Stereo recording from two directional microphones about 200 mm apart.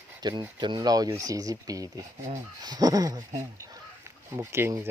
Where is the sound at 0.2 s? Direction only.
20° right (ahead or behind).